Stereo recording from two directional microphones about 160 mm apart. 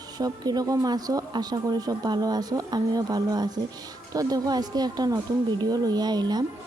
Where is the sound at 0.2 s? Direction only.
25° right (ahead or behind).